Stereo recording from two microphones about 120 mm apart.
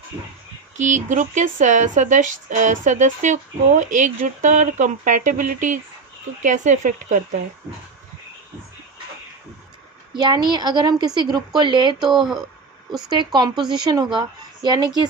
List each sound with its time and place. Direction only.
0.8 s speech: 85° right
10.1 s a woman's voice: 35° right (ahead or behind)